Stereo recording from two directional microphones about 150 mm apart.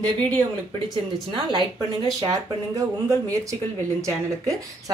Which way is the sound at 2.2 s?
25° right (ahead or behind).